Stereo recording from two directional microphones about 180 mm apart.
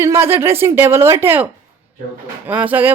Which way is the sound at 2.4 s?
10° right (ahead or behind).